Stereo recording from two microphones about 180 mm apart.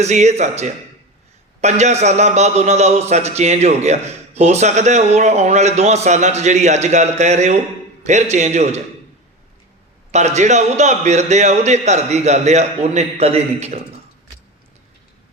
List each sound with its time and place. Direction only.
0.0 s a man's voice: 40° right (ahead or behind)
10.1 s a man's voice: 40° right (ahead or behind)